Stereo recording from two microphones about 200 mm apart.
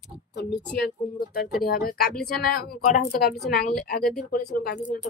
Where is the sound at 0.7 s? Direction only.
55° left (ahead or behind).